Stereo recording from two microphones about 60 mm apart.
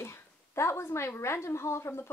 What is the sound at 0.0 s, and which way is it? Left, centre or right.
A woman's voice, left.